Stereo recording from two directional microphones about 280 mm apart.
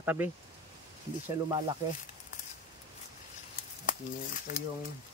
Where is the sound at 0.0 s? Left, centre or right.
Centre.